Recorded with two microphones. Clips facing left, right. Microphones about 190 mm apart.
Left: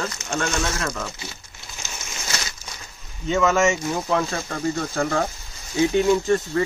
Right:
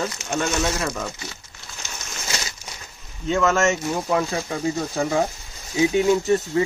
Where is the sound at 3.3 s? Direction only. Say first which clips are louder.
Even; centre (ahead or behind).